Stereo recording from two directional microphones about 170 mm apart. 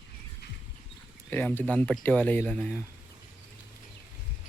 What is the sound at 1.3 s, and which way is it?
Speech, 10° left (ahead or behind).